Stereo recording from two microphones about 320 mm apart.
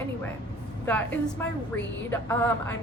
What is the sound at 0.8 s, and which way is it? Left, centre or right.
Speech, centre.